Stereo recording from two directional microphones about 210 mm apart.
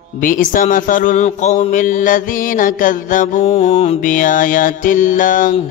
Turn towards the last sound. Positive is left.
turn(degrees=40)  # may be behind; listen again after turning